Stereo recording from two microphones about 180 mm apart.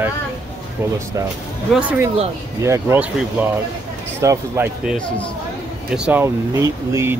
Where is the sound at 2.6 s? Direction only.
15° right (ahead or behind).